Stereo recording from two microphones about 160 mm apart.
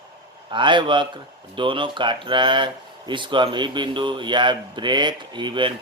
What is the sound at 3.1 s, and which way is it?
Mantra, 30° right (ahead or behind).